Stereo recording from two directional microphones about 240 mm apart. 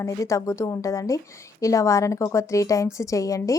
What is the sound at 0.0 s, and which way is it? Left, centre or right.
Speech, centre.